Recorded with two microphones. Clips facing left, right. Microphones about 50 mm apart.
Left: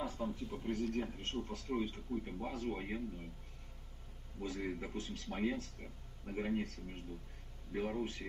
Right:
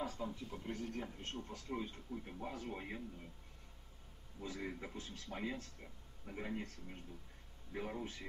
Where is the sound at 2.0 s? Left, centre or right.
Centre.